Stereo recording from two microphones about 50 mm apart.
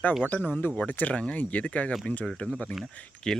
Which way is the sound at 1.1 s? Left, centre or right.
Left.